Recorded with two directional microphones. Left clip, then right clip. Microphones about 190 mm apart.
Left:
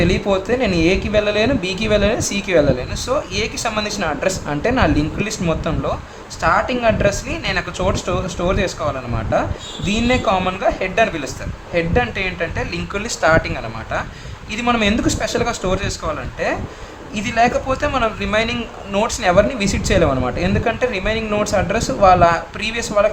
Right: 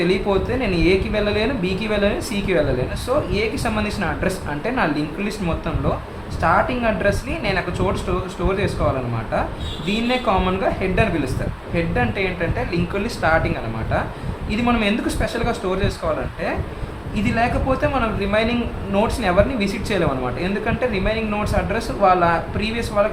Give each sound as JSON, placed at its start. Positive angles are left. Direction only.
{"t": 0.0, "sound": "speech", "side_deg": 40}
{"t": 9.8, "sound": "speech", "side_deg": 40}
{"t": 14.5, "sound": "speech", "side_deg": 45}
{"t": 17.2, "sound": "speech", "side_deg": 45}